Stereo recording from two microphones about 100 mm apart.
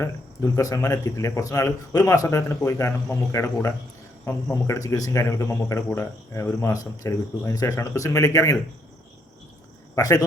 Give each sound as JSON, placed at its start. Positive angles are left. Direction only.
{"t": 0.5, "sound": "speech", "side_deg": 35}
{"t": 9.9, "sound": "speech", "side_deg": 35}